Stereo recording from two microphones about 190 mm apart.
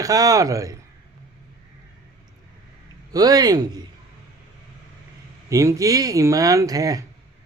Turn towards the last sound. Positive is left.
turn(degrees=-20)  # may be behind; listen again after turning